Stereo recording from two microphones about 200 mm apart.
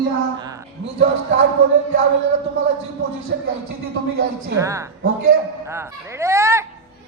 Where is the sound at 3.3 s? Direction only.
50° right (ahead or behind).